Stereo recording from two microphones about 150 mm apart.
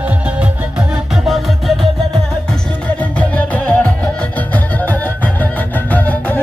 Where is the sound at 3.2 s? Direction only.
10° left (ahead or behind).